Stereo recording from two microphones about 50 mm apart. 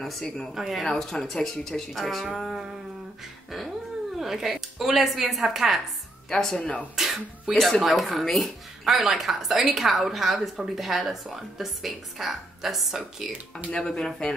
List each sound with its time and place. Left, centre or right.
0.0 s speech: centre
0.6 s speech: centre
0.8 s speech: centre
4.2 s speech: centre
6.3 s speech: centre
6.6 s speech: centre
7.0 s speech: centre
13.7 s speech: centre